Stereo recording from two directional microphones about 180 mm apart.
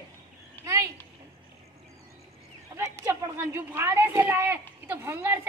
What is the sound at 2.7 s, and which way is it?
A woman's voice, 15° right (ahead or behind).